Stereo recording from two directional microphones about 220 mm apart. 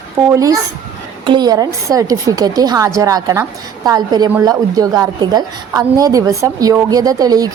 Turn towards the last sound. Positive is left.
turn(degrees=-15)  # may be behind; listen again after turning